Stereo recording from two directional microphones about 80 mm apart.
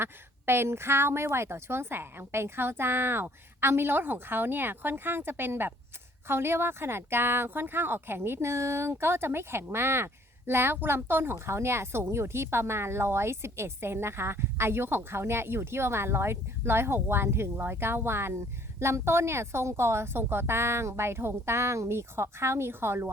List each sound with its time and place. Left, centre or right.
0.0 s a woman's voice: right